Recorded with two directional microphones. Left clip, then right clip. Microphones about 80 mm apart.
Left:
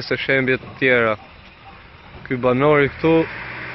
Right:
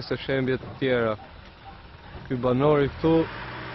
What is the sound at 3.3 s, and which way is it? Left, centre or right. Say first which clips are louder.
Vehicle: left 6 dB; centre.